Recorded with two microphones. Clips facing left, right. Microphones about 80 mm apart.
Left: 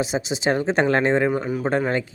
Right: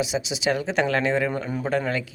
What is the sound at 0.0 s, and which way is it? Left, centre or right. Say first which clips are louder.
Speech: left 2 dB; left.